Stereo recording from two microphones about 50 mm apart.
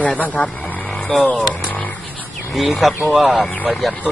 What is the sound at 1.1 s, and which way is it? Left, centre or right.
Speech, centre.